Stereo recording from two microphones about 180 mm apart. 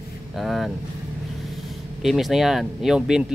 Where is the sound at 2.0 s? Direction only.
Centre (ahead or behind).